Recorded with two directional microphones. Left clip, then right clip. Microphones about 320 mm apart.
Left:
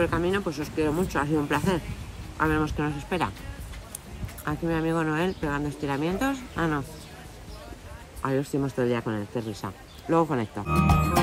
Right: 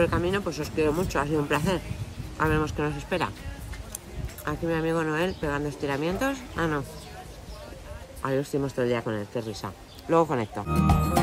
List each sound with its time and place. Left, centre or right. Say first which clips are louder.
0.0 s speech: even; centre
4.5 s speech: even; centre
8.2 s speech: even; centre